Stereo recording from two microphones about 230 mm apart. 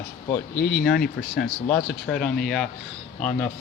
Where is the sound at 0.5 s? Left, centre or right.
Left.